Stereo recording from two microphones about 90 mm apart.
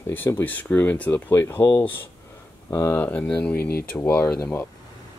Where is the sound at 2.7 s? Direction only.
40° left (ahead or behind).